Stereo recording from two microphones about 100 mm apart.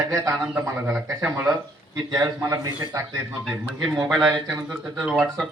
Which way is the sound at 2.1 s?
35° right (ahead or behind).